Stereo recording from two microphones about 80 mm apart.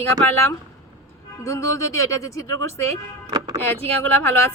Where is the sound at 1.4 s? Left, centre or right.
Left.